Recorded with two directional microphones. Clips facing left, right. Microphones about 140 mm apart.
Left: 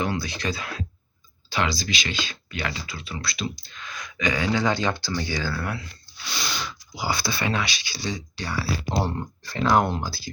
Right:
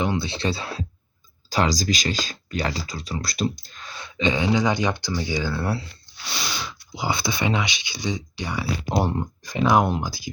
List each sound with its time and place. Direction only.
0.0 s speech: 25° right (ahead or behind)
6.9 s speech: 20° right (ahead or behind)